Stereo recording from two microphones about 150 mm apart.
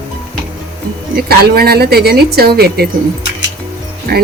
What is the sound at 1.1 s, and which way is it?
A woman's voice, 90° right.